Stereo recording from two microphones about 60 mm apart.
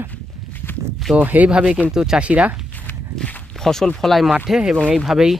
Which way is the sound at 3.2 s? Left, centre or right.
Centre.